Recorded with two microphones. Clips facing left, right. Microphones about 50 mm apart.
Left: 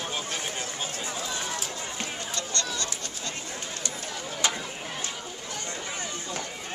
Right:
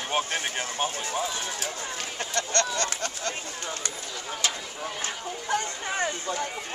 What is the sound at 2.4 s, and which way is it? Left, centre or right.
Speech, right.